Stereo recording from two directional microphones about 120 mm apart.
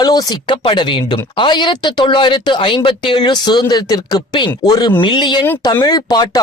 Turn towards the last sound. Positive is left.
turn(degrees=35)  # may be behind; listen again after turning